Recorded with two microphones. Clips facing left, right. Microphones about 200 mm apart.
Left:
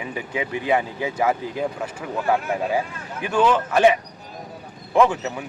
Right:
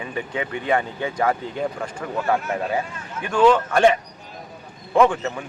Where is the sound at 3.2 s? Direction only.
5° left (ahead or behind).